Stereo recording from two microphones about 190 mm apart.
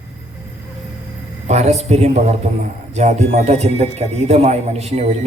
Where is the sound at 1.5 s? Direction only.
35° right (ahead or behind).